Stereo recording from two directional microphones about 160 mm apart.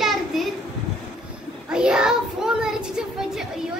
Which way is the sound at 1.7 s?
5° right (ahead or behind).